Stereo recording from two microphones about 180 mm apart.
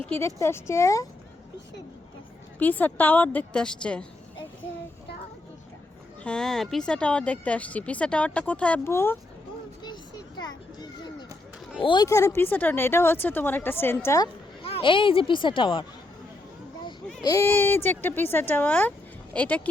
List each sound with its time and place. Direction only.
0.0 s speech: 10° left (ahead or behind)
2.6 s speech: 10° left (ahead or behind)
6.2 s speech: 5° left (ahead or behind)
9.8 s a sound: 25° left (ahead or behind)
10.8 s children playing: 25° left (ahead or behind)
11.8 s speech: 25° left (ahead or behind)
14.6 s speech: 30° left (ahead or behind)
17.2 s speech: 15° left (ahead or behind)